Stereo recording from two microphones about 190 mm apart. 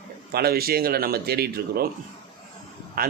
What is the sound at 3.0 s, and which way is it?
Speech, 50° right (ahead or behind).